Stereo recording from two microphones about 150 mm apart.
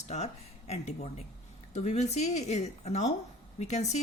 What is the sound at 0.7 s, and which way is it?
Speech, 45° left (ahead or behind).